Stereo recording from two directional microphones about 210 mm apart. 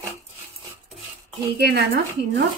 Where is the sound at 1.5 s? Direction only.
50° right (ahead or behind).